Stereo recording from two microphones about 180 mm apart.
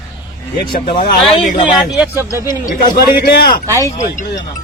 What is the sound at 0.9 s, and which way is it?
Speech, 55° left (ahead or behind).